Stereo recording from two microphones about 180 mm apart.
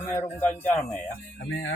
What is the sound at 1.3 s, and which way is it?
Speech, 75° left (ahead or behind).